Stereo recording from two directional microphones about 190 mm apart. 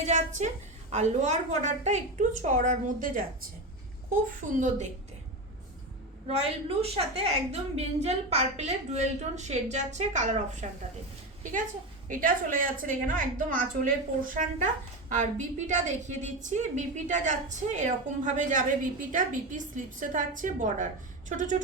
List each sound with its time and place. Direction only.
0.0 s a woman's voice: 40° right (ahead or behind)
4.5 s a woman's voice: 40° right (ahead or behind)
6.2 s a woman's voice: 35° right (ahead or behind)
12.0 s a woman's voice: 45° right (ahead or behind)
15.1 s a woman's voice: 40° right (ahead or behind)